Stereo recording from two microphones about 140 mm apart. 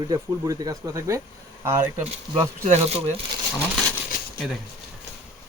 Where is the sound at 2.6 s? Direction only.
50° right (ahead or behind).